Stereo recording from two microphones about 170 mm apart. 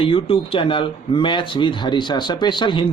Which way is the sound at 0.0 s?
30° left (ahead or behind).